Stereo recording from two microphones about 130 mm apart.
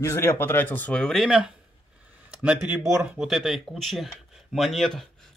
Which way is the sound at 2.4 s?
10° right (ahead or behind).